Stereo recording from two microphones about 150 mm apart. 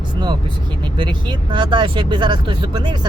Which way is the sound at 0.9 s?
30° right (ahead or behind).